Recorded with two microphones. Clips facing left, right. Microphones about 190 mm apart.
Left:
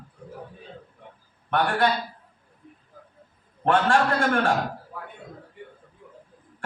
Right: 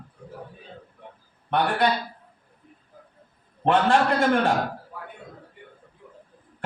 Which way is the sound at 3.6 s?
20° right (ahead or behind).